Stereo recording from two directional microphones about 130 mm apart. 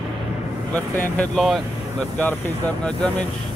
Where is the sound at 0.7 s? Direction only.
10° left (ahead or behind).